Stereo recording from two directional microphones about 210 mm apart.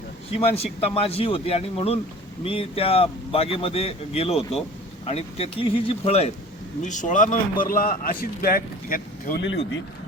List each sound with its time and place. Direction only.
0.3 s a man's voice: 30° left (ahead or behind)